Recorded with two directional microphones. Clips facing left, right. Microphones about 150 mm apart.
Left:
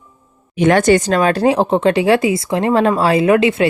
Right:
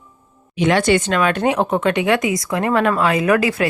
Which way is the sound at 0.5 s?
50° left (ahead or behind).